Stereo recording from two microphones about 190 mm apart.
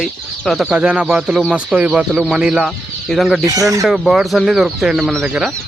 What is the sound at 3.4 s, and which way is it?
Speech, 15° right (ahead or behind).